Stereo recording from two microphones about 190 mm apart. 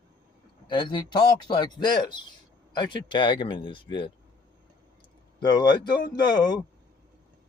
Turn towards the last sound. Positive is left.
turn(degrees=20)  # may be behind; listen again after turning